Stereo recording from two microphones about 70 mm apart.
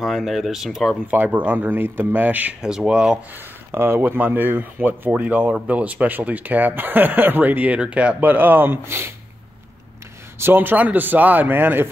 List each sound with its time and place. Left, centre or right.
0.0 s speech: centre
1.0 s speech: right
2.6 s speech: centre
3.7 s speech: right
10.4 s speech: right